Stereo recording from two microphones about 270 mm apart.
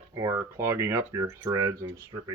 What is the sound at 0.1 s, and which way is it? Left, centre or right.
Speech, centre.